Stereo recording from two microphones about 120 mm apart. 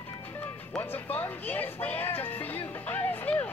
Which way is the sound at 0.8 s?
15° left (ahead or behind).